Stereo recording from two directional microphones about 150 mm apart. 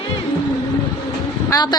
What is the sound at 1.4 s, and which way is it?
Vehicle, 25° left (ahead or behind).